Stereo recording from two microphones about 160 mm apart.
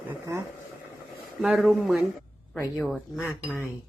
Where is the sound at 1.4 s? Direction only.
5° right (ahead or behind).